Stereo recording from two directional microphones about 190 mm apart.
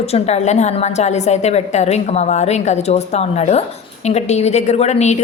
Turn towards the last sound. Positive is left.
turn(degrees=35)  # may be behind; listen again after turning